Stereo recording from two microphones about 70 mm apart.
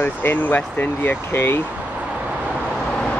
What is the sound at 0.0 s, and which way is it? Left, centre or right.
Speech, left.